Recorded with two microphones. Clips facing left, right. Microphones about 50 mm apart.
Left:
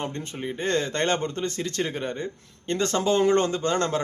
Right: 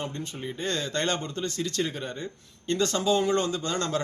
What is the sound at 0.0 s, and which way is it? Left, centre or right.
A man's voice, left.